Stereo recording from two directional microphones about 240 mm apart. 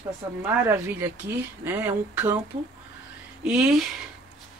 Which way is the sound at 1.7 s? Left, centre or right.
Centre.